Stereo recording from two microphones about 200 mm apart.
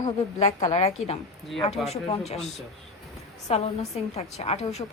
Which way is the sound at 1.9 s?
30° left (ahead or behind).